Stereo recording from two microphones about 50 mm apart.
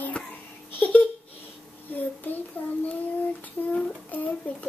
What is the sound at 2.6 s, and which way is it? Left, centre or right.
Child singing, left.